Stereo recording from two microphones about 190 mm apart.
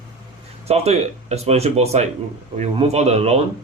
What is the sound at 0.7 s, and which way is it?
Speech, 35° right (ahead or behind).